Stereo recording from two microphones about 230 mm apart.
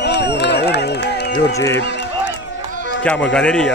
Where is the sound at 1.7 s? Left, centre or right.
Left.